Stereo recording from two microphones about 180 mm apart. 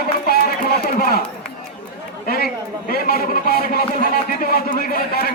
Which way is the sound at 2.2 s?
55° left (ahead or behind).